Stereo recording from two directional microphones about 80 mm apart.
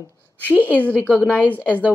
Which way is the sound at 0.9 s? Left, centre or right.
Centre.